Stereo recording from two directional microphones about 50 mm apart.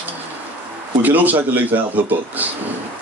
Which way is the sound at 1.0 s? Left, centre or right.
Right.